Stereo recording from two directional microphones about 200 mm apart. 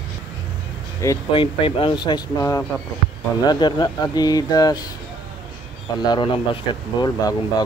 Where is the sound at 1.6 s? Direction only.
25° left (ahead or behind).